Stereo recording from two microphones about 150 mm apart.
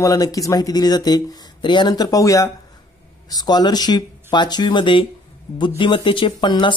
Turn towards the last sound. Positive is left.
turn(degrees=30)  # may be behind; listen again after turning